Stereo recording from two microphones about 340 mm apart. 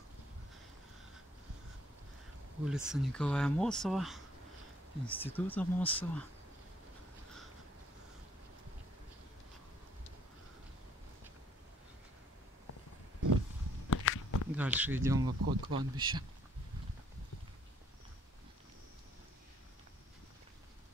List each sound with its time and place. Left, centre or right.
2.6 s speech: centre
13.8 s walk: left
14.5 s speech: centre